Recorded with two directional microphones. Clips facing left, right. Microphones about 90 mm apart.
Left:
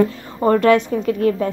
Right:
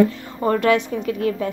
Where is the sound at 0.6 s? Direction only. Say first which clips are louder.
Left 4 dB; 40° left (ahead or behind).